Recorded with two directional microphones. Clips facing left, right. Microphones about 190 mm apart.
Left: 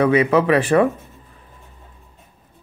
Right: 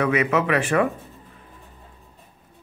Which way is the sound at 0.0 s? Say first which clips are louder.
Left 5 dB; 30° left (ahead or behind).